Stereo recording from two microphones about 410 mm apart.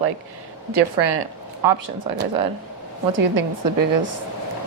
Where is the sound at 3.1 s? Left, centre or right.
Right.